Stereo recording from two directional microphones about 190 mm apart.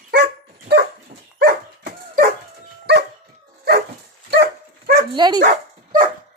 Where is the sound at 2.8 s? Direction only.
60° right (ahead or behind).